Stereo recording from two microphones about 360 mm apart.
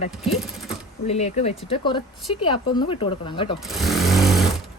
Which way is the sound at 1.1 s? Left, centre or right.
Centre.